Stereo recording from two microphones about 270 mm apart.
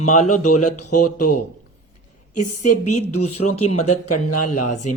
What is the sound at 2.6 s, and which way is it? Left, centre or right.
A woman's voice, left.